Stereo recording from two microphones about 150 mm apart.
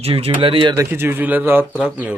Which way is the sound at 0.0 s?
40° right (ahead or behind).